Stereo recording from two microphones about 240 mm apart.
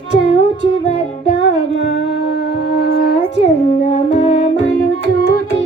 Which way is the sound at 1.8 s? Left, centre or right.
Left.